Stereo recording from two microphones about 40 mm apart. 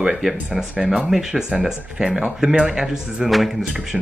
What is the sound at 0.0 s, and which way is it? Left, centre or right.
Speech, centre.